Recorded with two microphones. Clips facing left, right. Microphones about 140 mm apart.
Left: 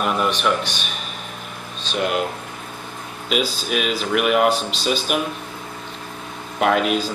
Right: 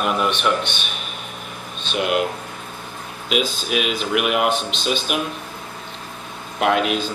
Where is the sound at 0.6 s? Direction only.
40° left (ahead or behind).